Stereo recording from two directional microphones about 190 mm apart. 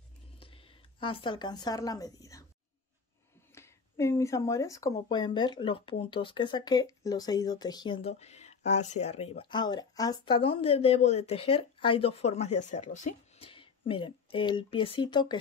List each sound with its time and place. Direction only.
0.4 s speech: 30° left (ahead or behind)
3.5 s a sound: 15° left (ahead or behind)
5.1 s speech: 25° left (ahead or behind)